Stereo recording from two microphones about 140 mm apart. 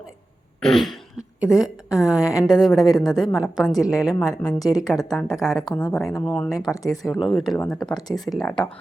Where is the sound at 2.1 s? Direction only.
25° left (ahead or behind).